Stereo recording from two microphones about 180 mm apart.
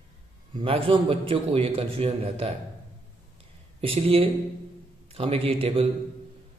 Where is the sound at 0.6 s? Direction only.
30° right (ahead or behind).